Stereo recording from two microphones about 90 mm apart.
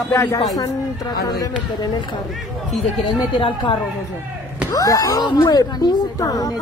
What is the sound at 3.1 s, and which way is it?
Speech, 70° left (ahead or behind).